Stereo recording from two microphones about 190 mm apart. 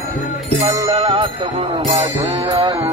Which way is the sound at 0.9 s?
30° right (ahead or behind).